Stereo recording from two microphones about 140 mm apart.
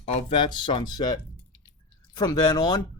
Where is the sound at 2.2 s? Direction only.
30° left (ahead or behind).